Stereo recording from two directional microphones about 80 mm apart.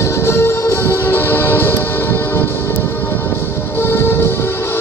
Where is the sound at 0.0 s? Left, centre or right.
Left.